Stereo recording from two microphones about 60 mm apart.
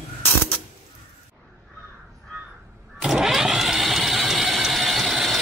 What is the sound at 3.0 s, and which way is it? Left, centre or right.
Vehicle, centre.